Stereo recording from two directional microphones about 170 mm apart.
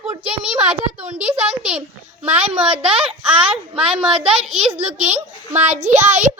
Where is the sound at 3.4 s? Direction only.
35° right (ahead or behind).